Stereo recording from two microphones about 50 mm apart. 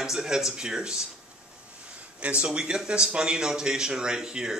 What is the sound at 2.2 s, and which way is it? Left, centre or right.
Speech, right.